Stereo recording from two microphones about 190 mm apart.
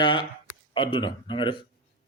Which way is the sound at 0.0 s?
25° left (ahead or behind).